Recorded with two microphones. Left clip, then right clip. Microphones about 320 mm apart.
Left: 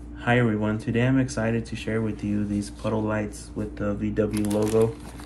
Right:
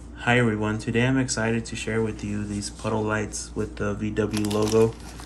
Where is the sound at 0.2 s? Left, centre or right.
Centre.